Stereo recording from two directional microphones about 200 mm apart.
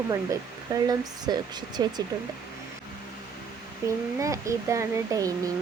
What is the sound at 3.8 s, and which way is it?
Speech, 15° right (ahead or behind).